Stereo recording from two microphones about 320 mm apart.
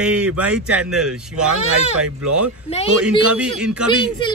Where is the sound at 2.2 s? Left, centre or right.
Right.